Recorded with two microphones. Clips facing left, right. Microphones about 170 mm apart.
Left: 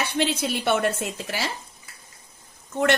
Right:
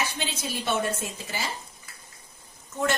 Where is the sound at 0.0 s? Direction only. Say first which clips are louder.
Left 7 dB; 65° left (ahead or behind).